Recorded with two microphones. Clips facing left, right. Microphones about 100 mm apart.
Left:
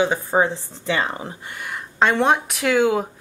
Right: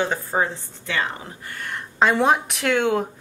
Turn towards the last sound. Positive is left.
turn(degrees=0)  # may be behind; listen again after turning